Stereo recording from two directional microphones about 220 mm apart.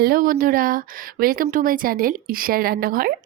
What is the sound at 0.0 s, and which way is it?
A woman's voice, 40° right (ahead or behind).